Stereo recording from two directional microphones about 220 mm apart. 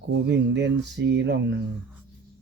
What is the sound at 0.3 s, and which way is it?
Speech, 50° right (ahead or behind).